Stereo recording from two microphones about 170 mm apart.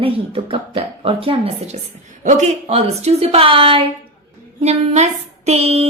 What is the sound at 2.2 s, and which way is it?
A woman's voice, 45° right (ahead or behind).